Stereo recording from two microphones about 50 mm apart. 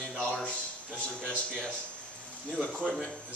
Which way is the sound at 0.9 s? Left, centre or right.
Left.